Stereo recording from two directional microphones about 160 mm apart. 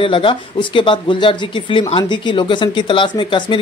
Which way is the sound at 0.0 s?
35° left (ahead or behind).